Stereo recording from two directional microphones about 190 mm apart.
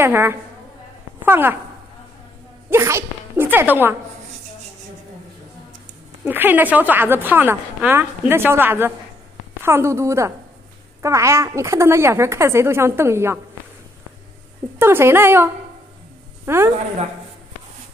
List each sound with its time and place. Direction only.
0.0 s a woman's voice: 10° right (ahead or behind)
2.7 s speech: 15° right (ahead or behind)
6.2 s a woman's voice: 10° right (ahead or behind)
14.8 s a woman's voice: 10° right (ahead or behind)